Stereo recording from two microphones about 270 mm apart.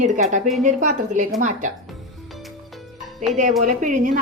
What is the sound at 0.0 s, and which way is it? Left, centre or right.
A woman's voice, right.